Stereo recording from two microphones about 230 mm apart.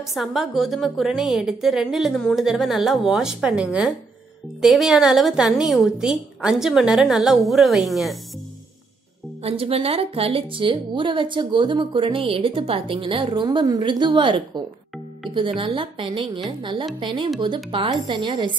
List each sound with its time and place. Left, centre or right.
0.0 s a woman's voice: centre
9.4 s a woman's voice: right